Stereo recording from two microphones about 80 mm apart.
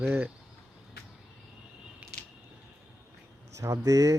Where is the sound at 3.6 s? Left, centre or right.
Right.